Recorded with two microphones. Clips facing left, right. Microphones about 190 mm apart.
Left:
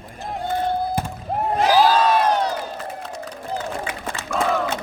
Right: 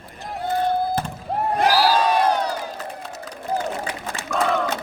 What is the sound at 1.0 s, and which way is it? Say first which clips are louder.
Fireworks: left 1 dB; 10° left (ahead or behind).